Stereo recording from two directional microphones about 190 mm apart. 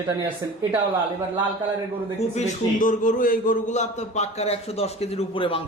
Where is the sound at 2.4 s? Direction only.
45° left (ahead or behind); by 5.6 s 30° left (ahead or behind).